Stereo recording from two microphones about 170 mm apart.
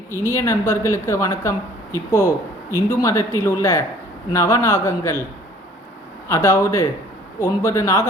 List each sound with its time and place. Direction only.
0.1 s speech: 15° left (ahead or behind)
6.2 s speech: 15° left (ahead or behind)